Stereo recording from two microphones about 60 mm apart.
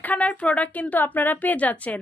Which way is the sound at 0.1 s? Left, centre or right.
Left.